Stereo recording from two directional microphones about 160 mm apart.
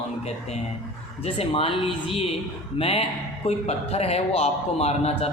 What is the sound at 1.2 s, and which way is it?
A man's voice, 35° left (ahead or behind).